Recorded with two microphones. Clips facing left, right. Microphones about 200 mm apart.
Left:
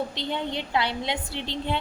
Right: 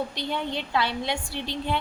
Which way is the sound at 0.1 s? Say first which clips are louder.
Even; 20° left (ahead or behind).